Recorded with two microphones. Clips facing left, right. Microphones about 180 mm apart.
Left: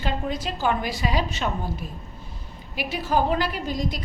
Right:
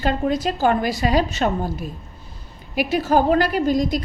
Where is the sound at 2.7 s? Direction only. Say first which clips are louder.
Right 6 dB; 45° right (ahead or behind).